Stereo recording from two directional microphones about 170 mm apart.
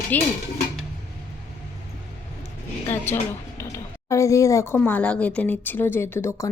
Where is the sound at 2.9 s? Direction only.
15° left (ahead or behind).